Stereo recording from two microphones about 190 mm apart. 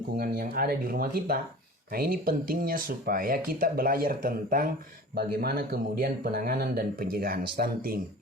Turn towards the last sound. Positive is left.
turn(degrees=-50)  # may be behind; listen again after turning